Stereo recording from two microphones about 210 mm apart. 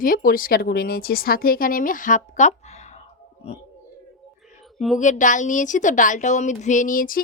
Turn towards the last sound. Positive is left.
turn(degrees=40)  # may be behind; listen again after turning